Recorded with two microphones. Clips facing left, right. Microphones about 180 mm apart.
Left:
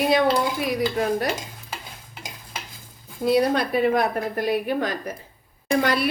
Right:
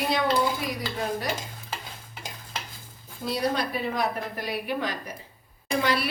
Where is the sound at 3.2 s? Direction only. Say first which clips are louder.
Left 7 dB; 60° left (ahead or behind).